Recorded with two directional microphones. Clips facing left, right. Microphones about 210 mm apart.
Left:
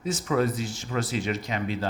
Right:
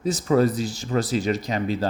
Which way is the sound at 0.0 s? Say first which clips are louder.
Right 5 dB; 35° right (ahead or behind).